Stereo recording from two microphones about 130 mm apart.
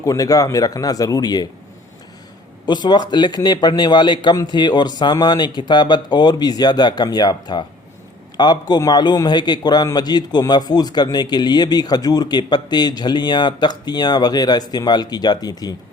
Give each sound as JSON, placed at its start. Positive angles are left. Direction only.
{"t": 0.0, "sound": "a man's voice", "side_deg": 25}
{"t": 2.6, "sound": "a man's voice", "side_deg": 35}